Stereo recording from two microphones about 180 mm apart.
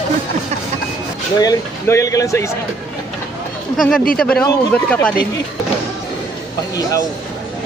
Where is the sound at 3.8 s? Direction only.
5° left (ahead or behind).